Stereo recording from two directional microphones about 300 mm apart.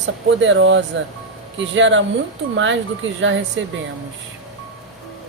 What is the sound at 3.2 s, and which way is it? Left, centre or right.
Speech, right.